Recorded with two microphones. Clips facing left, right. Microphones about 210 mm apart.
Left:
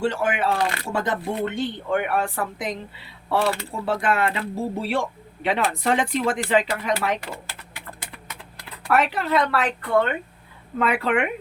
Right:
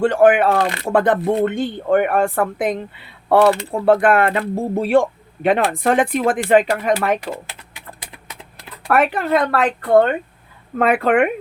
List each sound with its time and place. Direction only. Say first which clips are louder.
0.0 s speech: right 10 dB; 55° right (ahead or behind)
8.9 s speech: right 5 dB; 50° right (ahead or behind)